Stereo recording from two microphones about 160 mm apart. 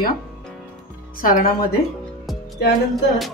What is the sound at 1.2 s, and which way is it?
Speech, 60° left (ahead or behind).